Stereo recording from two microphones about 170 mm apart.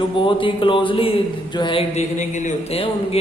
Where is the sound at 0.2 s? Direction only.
30° left (ahead or behind).